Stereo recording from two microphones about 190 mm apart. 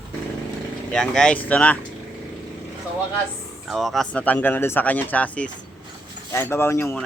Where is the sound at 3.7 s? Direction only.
Centre (ahead or behind).